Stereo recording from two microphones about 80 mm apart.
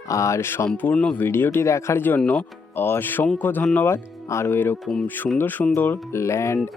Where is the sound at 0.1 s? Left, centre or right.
Left.